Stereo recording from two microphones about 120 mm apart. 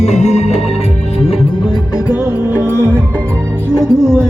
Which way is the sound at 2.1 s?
15° right (ahead or behind).